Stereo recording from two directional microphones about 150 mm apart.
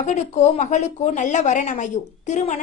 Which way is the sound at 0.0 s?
50° left (ahead or behind).